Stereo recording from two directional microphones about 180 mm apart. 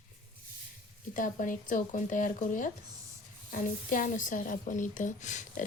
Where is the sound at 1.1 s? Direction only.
50° left (ahead or behind).